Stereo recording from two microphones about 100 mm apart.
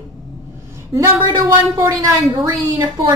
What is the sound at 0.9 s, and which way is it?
A woman's voice, 35° right (ahead or behind).